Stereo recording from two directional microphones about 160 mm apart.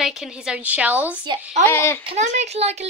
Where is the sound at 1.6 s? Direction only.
15° left (ahead or behind).